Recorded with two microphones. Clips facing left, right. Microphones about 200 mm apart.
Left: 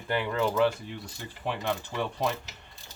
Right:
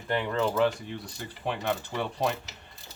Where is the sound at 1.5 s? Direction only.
20° right (ahead or behind).